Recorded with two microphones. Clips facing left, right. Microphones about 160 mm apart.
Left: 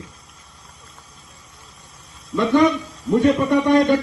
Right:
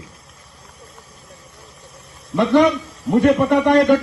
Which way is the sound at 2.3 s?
65° right (ahead or behind).